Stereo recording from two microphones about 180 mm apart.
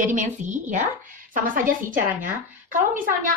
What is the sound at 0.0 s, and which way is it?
A woman's voice, 45° right (ahead or behind).